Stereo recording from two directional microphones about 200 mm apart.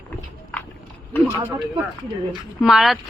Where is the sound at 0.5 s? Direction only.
5° left (ahead or behind).